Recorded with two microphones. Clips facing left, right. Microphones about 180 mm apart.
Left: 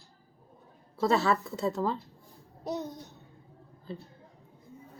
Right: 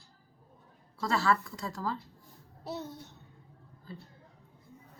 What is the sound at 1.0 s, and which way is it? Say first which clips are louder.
A child's voice: left 3 dB; 20° left (ahead or behind).